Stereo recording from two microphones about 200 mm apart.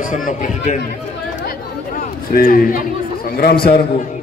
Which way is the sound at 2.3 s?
45° left (ahead or behind).